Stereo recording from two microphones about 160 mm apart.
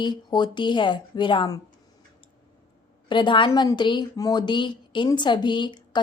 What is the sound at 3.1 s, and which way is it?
A woman's voice, 30° left (ahead or behind).